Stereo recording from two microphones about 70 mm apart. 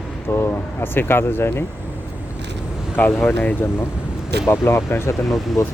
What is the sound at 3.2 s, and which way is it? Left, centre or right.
Speech, left.